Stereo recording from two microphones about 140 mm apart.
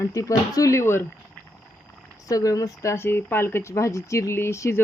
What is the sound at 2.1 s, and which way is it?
Speech, 25° left (ahead or behind).